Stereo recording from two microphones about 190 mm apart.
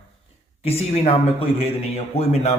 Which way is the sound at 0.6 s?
30° left (ahead or behind).